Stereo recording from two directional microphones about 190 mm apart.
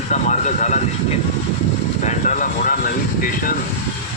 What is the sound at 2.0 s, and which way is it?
Speech, 45° left (ahead or behind).